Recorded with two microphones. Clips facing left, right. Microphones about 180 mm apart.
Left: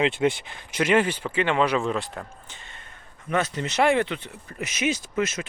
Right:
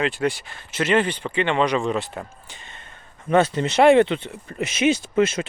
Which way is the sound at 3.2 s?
30° right (ahead or behind).